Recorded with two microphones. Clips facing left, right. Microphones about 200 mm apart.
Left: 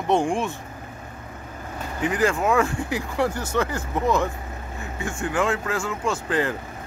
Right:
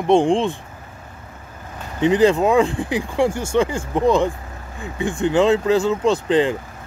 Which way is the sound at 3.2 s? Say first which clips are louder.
Right 7 dB; 25° right (ahead or behind).